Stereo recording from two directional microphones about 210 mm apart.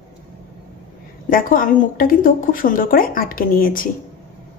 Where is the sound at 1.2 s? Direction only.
40° left (ahead or behind).